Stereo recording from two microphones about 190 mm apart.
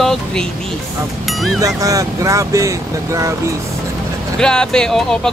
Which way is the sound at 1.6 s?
15° right (ahead or behind).